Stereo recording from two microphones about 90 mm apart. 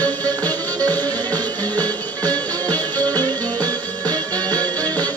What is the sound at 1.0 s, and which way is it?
Music, 50° right (ahead or behind).